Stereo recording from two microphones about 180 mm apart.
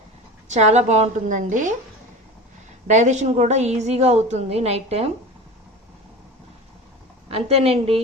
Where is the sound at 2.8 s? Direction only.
40° right (ahead or behind).